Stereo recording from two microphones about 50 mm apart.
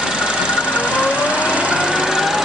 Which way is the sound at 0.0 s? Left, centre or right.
Centre.